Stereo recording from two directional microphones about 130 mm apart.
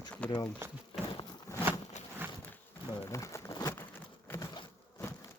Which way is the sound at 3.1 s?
25° left (ahead or behind).